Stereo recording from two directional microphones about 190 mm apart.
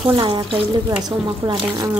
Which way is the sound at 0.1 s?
25° right (ahead or behind).